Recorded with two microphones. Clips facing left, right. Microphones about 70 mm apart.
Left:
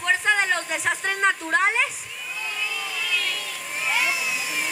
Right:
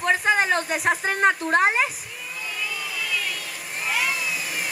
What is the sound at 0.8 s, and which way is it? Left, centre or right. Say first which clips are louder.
Speech: right 2 dB; centre.